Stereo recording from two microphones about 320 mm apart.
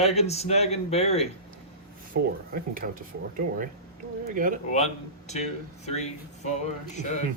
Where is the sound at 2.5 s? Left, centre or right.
Right.